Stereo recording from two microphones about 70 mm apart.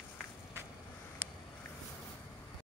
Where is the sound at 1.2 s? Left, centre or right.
Right.